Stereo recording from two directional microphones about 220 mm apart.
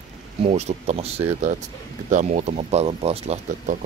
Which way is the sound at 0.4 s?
30° right (ahead or behind).